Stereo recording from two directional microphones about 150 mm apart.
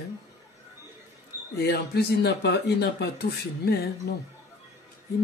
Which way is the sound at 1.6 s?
90° left.